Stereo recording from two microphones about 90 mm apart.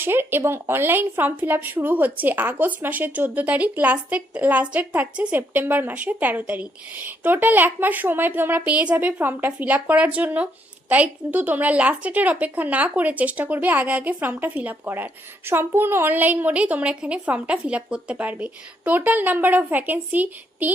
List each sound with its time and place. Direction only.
0.0 s speech: 25° right (ahead or behind)